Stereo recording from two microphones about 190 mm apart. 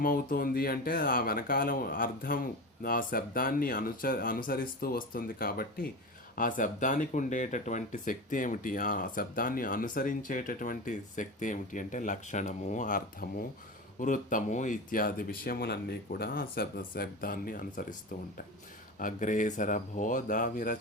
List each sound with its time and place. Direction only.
0.0 s speech: 50° left (ahead or behind)
18.9 s speech: 45° left (ahead or behind)